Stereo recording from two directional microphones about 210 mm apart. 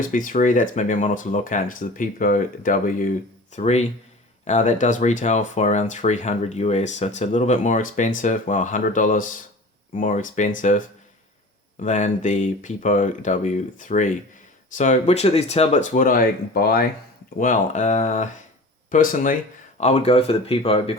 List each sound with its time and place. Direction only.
0.0 s speech: 40° left (ahead or behind)